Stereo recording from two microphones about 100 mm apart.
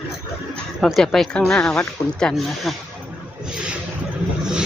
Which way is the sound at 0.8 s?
5° left (ahead or behind).